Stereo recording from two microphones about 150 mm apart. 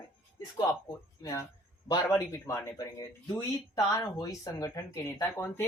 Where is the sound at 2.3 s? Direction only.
15° left (ahead or behind).